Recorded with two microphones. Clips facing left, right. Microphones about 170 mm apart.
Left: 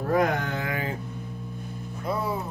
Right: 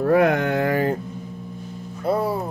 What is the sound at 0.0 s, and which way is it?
Speech, 70° right (ahead or behind).